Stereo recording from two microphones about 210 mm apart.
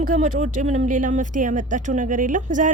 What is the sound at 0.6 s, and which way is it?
Speech, 35° right (ahead or behind).